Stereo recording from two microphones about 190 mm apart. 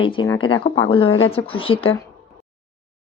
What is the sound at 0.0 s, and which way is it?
Speech, 25° left (ahead or behind).